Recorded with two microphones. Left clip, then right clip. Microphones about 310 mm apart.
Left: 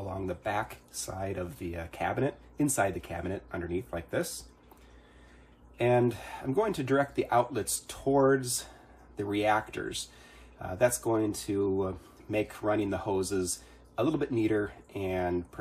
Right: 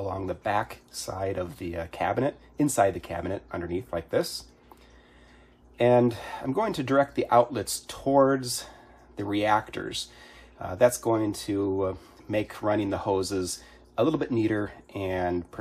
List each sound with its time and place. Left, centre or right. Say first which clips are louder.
0.0 s speech: right 5 dB; right
5.8 s speech: right 5 dB; right